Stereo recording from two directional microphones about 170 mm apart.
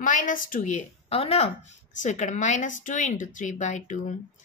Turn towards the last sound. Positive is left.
turn(degrees=45)  # may be behind; listen again after turning